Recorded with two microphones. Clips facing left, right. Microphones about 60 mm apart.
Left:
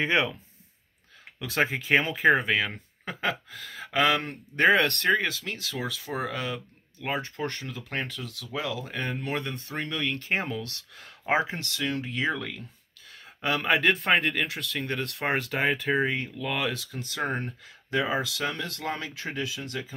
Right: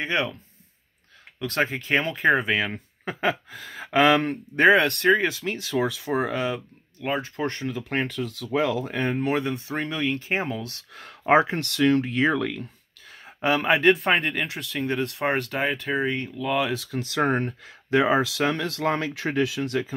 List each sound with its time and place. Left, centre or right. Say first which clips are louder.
0.0 s speech: left 1 dB; centre
1.4 s speech: right 1 dB; centre
2.4 s speech: right 2 dB; centre; by 4.4 s right
4.6 s speech: right 3 dB; centre
5.2 s speech: right 5 dB; right
7.0 s speech: right 4 dB; centre
7.4 s speech: right 5 dB; right
11.0 s speech: right 7 dB; right
13.2 s a sound: right 5 dB; right
13.7 s speech: right 3 dB; centre
17.1 s speech: right 7 dB; right
19.1 s speech: right 8 dB; right